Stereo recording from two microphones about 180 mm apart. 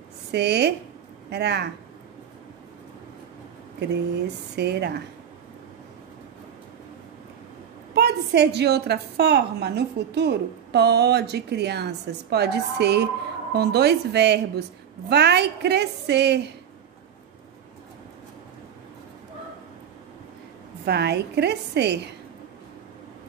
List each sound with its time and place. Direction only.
0.3 s a woman's voice: 65° right (ahead or behind)
3.9 s a woman's voice: 65° right (ahead or behind)
7.9 s a woman's voice: 65° right (ahead or behind)
20.8 s a woman's voice: 65° right (ahead or behind)